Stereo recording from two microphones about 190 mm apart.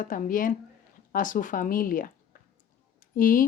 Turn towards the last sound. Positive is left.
turn(degrees=45)  # may be behind; listen again after turning